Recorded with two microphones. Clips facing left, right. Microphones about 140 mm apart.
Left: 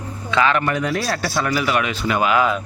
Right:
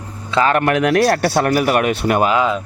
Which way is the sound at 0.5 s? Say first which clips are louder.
Right 7 dB; 75° right (ahead or behind).